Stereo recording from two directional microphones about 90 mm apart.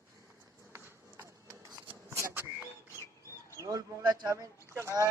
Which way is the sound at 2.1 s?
30° right (ahead or behind).